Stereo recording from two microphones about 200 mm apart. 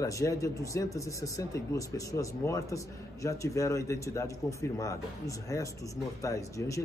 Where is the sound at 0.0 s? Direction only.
15° left (ahead or behind).